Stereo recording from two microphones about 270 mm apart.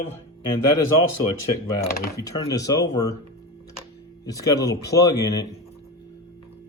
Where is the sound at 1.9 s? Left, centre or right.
Left.